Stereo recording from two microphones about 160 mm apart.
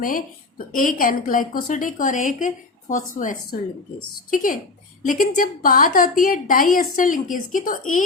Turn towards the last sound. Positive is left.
turn(degrees=55)  # may be behind; listen again after turning